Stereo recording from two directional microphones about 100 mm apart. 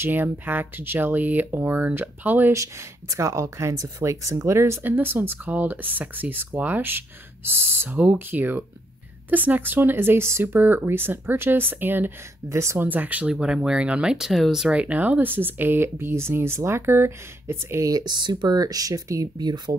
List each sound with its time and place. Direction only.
0.0 s speech: 20° right (ahead or behind)
2.5 s speech: 30° right (ahead or behind)